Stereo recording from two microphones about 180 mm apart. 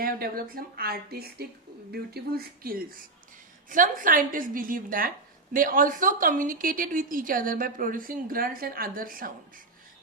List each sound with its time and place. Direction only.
0.0 s a woman's voice: 55° right (ahead or behind)